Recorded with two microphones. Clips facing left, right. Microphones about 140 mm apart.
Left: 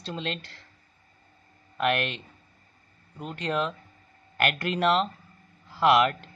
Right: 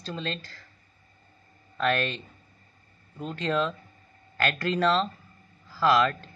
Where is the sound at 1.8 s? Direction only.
15° left (ahead or behind).